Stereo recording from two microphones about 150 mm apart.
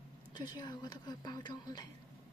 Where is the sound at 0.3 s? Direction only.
30° left (ahead or behind).